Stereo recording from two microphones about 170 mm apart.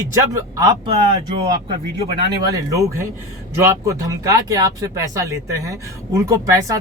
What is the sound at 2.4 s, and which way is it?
Speech, 20° right (ahead or behind).